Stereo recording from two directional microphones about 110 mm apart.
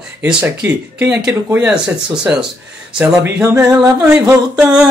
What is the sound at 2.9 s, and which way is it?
Speech, 5° right (ahead or behind).